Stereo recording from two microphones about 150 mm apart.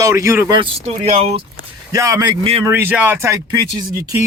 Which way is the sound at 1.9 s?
20° right (ahead or behind).